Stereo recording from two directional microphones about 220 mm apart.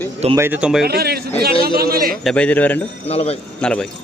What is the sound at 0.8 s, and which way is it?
Speech, 45° right (ahead or behind).